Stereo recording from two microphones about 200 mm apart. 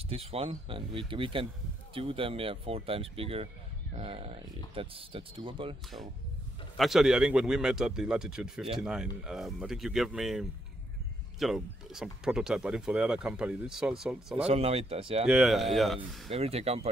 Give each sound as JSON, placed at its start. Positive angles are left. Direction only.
{"t": 0.1, "sound": "speech", "side_deg": -30}
{"t": 6.8, "sound": "speech", "side_deg": 0}
{"t": 14.4, "sound": "speech", "side_deg": -30}
{"t": 15.2, "sound": "speech", "side_deg": 0}
{"t": 16.3, "sound": "speech", "side_deg": -30}